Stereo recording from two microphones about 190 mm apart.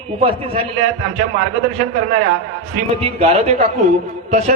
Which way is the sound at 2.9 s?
30° right (ahead or behind).